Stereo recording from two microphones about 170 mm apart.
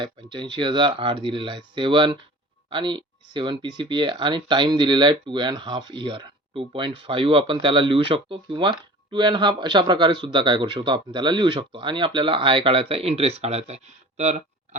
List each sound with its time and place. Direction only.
0.0 s speech: 30° right (ahead or behind)